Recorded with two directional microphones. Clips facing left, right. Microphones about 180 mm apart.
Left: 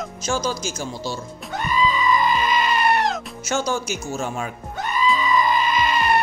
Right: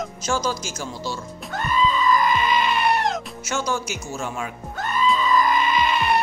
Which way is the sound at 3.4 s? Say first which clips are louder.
Left 3 dB; 35° left (ahead or behind).